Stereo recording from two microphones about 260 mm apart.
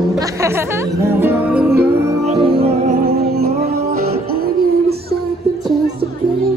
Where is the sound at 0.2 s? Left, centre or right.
Centre.